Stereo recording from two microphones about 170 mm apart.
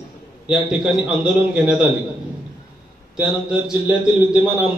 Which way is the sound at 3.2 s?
5° right (ahead or behind).